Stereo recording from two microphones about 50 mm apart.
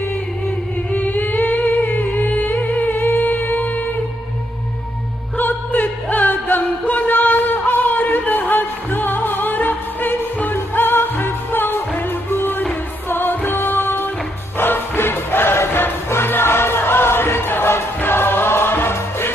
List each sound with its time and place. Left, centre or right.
0.9 s music: left
5.4 s music: left